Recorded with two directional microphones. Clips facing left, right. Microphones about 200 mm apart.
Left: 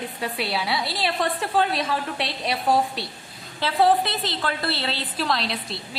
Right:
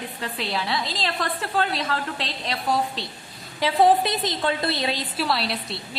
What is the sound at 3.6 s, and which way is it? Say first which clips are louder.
A woman's voice: right 1 dB; 15° right (ahead or behind).